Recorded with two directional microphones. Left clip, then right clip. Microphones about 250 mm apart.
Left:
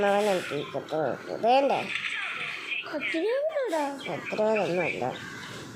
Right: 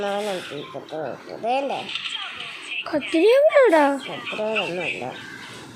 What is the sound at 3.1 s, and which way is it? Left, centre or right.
Speech, right.